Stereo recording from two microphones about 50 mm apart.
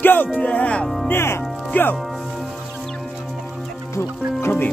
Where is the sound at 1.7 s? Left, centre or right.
Left.